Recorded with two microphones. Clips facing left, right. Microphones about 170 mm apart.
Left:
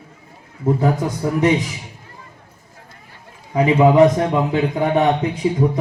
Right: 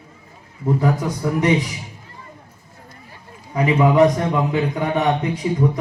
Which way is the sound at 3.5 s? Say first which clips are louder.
Left 3 dB; 25° left (ahead or behind).